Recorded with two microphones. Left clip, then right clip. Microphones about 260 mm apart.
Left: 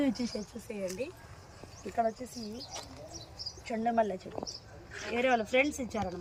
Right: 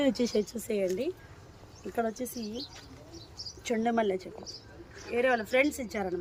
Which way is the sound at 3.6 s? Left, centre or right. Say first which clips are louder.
Right 2 dB; right.